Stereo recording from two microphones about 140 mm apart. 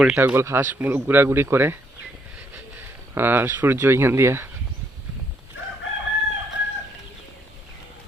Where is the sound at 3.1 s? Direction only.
15° right (ahead or behind).